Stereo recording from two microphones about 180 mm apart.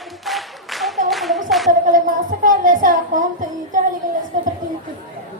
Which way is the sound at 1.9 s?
50° right (ahead or behind).